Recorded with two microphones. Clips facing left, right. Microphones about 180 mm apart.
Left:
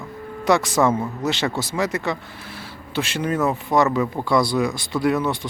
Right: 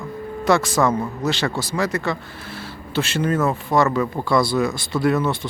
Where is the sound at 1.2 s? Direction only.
20° left (ahead or behind).